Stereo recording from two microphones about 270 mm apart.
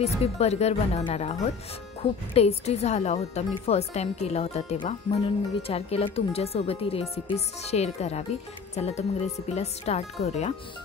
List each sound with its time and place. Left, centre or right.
0.0 s speech: left